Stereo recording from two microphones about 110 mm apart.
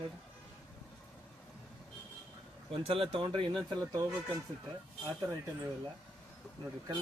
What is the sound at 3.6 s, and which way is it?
Speech, 40° right (ahead or behind).